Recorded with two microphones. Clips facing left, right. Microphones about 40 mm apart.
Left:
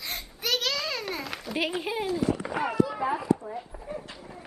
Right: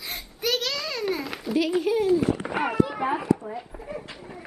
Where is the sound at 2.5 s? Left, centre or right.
Right.